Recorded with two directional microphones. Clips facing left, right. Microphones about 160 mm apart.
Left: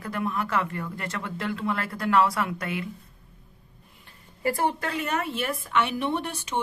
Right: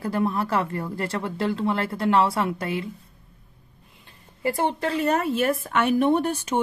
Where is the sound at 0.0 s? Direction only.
30° right (ahead or behind).